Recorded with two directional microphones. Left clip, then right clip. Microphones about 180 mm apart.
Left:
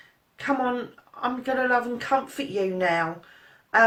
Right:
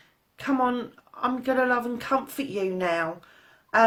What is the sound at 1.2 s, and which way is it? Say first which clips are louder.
A woman's voice: right 1 dB; 55° right (ahead or behind).